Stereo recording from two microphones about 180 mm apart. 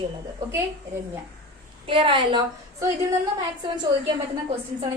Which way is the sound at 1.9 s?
30° right (ahead or behind).